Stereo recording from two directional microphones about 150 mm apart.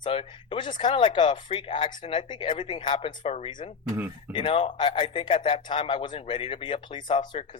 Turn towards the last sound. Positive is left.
turn(degrees=30)  # may be behind; listen again after turning